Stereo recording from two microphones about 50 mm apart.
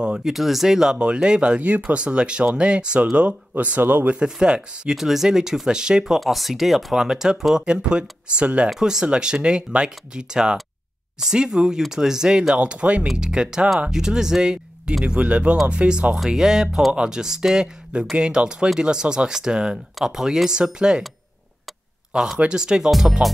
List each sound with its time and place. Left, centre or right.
0.0 s speech: centre
0.3 s speech: centre
0.9 s speech: right
4.1 s speech: centre
6.1 s speech: centre; by 8.6 s right
8.6 s speech: centre
16.3 s speech: centre
22.4 s speech: centre
22.8 s speech: centre